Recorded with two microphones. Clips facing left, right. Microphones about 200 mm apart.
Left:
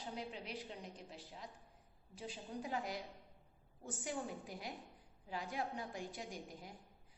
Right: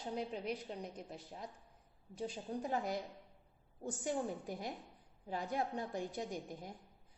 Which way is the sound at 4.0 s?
40° right (ahead or behind).